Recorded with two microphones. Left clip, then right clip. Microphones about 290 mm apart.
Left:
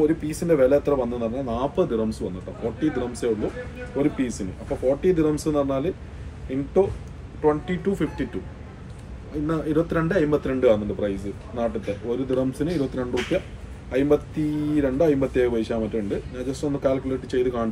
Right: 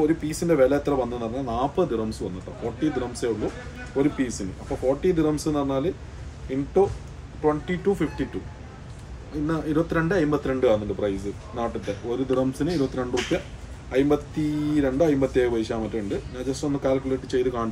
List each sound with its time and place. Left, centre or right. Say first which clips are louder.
0.0 s speech: left 1 dB; centre
9.5 s speech: left 2 dB; centre